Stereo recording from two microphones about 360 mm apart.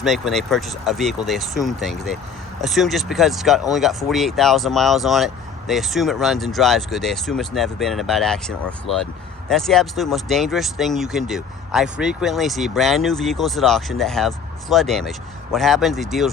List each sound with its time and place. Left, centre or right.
0.0 s speech: centre